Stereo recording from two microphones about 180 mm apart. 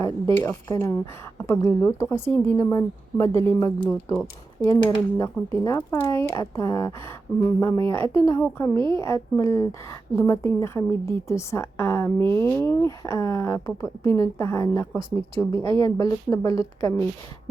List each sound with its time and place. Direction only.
0.3 s a woman's voice: 15° left (ahead or behind)
8.0 s a woman's voice: 30° right (ahead or behind)
8.3 s a woman's voice: 15° left (ahead or behind)
15.5 s a woman's voice: 30° right (ahead or behind)
15.8 s a woman's voice: 20° left (ahead or behind)